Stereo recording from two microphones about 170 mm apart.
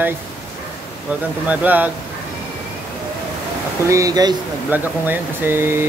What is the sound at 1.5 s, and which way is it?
Speech, 10° right (ahead or behind).